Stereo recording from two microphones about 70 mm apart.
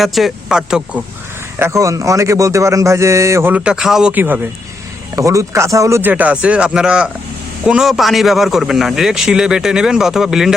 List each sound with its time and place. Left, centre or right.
0.0 s a man's voice: centre
1.5 s speech: right
3.6 s speech: centre
4.1 s a man's voice: right
5.1 s speech: right
6.0 s speech: right
7.9 s a man's voice: centre